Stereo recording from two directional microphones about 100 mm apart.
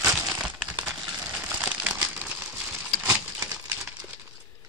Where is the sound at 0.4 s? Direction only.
10° right (ahead or behind).